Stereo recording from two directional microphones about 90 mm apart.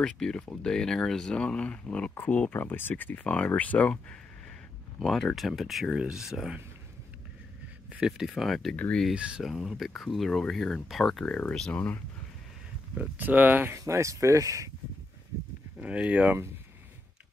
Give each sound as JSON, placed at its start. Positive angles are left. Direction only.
{"t": 0.0, "sound": "speech", "side_deg": 5}
{"t": 7.9, "sound": "speech", "side_deg": -10}
{"t": 8.7, "sound": "speech", "side_deg": 15}
{"t": 9.1, "sound": "speech", "side_deg": -10}
{"t": 9.4, "sound": "speech", "side_deg": 0}
{"t": 12.9, "sound": "speech", "side_deg": -15}
{"t": 13.7, "sound": "speech", "side_deg": -35}
{"t": 15.8, "sound": "speech", "side_deg": -15}